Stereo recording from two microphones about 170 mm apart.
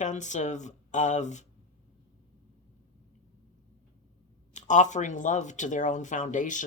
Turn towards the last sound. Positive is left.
turn(degrees=50)  # may be behind; listen again after turning